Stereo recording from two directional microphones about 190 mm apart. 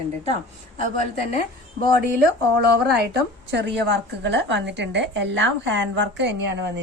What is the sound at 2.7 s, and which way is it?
A woman's voice, 60° right (ahead or behind).